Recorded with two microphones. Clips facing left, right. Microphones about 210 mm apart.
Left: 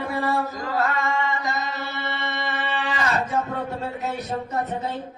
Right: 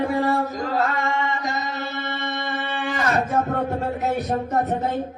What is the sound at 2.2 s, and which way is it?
Music, 50° right (ahead or behind).